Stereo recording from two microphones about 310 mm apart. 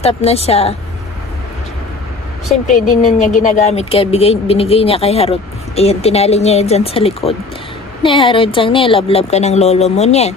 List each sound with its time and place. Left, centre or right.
0.0 s speech: centre
2.6 s speech: left